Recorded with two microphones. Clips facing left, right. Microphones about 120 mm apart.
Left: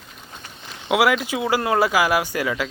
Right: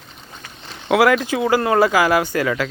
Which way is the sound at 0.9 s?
15° left (ahead or behind).